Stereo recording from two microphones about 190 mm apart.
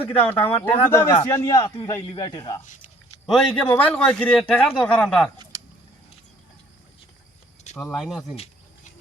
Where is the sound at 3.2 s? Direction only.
5° left (ahead or behind).